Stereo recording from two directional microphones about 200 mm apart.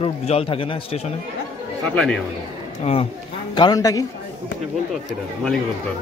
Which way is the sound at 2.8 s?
30° left (ahead or behind).